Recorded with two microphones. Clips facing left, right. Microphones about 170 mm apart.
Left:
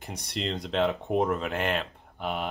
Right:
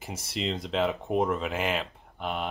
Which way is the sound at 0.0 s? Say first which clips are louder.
Right 1 dB; 5° right (ahead or behind).